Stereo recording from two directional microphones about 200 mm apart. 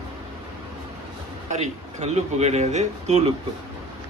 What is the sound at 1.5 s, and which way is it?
Speech, 35° right (ahead or behind).